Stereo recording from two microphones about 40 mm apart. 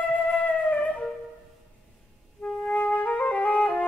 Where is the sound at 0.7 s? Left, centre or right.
Left.